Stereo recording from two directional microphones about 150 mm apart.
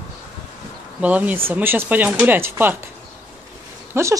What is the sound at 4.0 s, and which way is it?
Speech, 15° right (ahead or behind).